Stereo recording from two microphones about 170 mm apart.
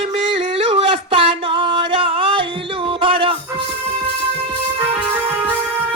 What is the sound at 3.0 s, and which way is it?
Music, 35° right (ahead or behind).